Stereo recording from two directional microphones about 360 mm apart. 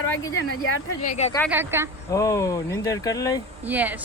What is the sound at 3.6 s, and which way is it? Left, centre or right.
Speech, centre.